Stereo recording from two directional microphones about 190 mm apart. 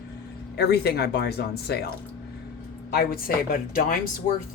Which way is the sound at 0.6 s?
60° left (ahead or behind).